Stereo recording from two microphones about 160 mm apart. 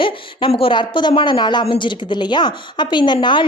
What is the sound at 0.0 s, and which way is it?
Speech, 35° left (ahead or behind).